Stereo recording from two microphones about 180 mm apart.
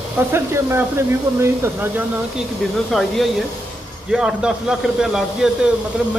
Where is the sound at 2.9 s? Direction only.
Centre (ahead or behind).